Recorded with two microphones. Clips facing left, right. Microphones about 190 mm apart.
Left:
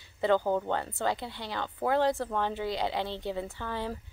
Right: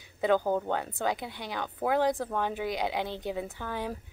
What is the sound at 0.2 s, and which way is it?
Speech, 10° right (ahead or behind).